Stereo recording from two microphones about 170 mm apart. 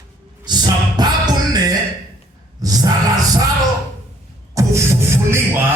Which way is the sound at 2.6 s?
20° right (ahead or behind).